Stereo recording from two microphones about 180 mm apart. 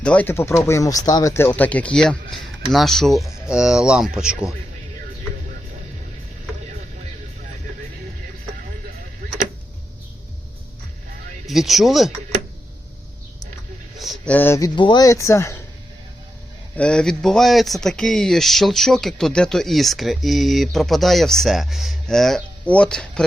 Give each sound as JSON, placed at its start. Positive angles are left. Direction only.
{"t": 0.0, "sound": "speech", "side_deg": 5}
{"t": 11.4, "sound": "speech", "side_deg": 0}
{"t": 14.0, "sound": "a sound", "side_deg": 0}
{"t": 14.3, "sound": "speech", "side_deg": 15}
{"t": 14.8, "sound": "speech", "side_deg": 25}
{"t": 16.7, "sound": "speech", "side_deg": 5}